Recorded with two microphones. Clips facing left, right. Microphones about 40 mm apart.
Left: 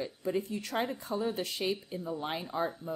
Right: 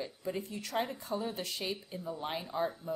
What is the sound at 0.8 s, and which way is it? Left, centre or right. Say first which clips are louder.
A woman's voice: left 1 dB; left.